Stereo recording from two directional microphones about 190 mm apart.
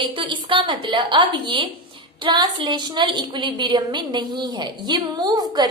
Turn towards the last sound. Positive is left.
turn(degrees=-20)  # may be behind; listen again after turning